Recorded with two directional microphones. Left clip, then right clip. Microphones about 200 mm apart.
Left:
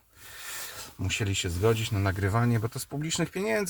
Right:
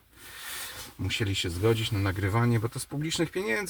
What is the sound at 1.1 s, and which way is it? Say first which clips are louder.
Speech: even; 30° left (ahead or behind).